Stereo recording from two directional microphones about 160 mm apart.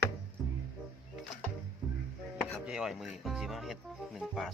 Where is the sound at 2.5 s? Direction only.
5° right (ahead or behind).